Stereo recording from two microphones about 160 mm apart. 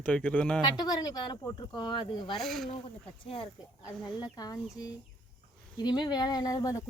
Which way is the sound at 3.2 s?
35° left (ahead or behind).